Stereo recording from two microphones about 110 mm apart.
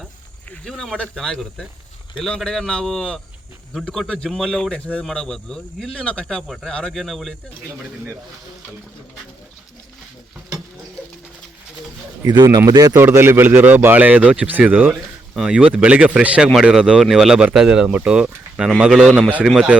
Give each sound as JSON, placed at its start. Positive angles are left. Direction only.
{"t": 0.5, "sound": "a man's voice", "side_deg": 5}
{"t": 12.2, "sound": "a man's voice", "side_deg": -35}
{"t": 12.9, "sound": "a man's voice", "side_deg": -20}